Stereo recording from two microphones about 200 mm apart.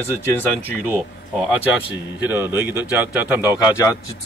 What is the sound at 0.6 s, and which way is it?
Speech, 10° right (ahead or behind).